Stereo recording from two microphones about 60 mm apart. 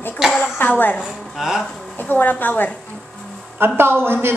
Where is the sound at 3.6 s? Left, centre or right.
Right.